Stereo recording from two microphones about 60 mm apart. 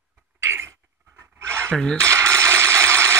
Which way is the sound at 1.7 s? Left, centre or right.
Centre.